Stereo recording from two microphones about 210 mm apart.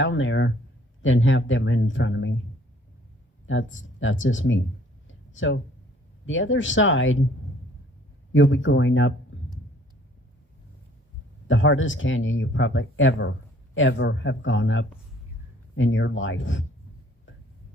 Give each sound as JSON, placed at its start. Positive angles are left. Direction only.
{"t": 0.0, "sound": "speech", "side_deg": 65}
{"t": 3.4, "sound": "speech", "side_deg": 65}
{"t": 5.0, "sound": "a sound", "side_deg": 65}
{"t": 6.2, "sound": "speech", "side_deg": 65}
{"t": 8.3, "sound": "speech", "side_deg": 65}
{"t": 11.4, "sound": "speech", "side_deg": 65}